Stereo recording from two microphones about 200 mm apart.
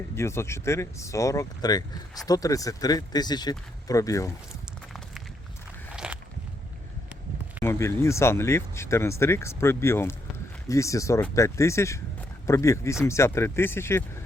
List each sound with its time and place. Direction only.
0.2 s speech: 15° left (ahead or behind)
6.0 s walk: 5° right (ahead or behind)
7.6 s speech: 15° left (ahead or behind)